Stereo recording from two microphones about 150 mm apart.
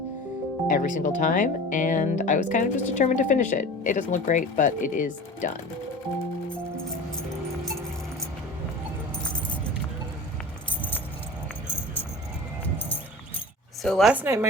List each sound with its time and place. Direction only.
0.7 s speech: 60° left (ahead or behind)
13.8 s speech: centre (ahead or behind)
14.1 s speech: 10° right (ahead or behind)